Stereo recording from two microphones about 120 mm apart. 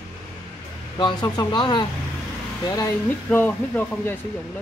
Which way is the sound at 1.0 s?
40° left (ahead or behind).